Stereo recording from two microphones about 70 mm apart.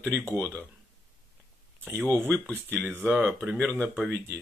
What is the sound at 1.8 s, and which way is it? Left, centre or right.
Speech, right.